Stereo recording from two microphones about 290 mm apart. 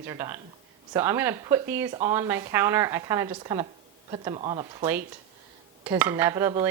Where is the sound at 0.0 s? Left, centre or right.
Centre.